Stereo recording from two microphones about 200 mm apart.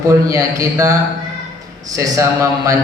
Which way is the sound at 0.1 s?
15° right (ahead or behind).